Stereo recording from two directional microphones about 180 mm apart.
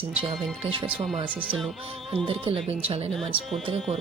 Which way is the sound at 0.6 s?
30° right (ahead or behind).